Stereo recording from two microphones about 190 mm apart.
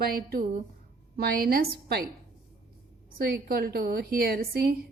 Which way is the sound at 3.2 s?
55° right (ahead or behind).